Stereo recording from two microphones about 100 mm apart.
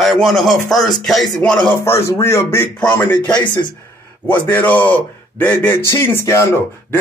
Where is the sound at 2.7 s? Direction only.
10° left (ahead or behind).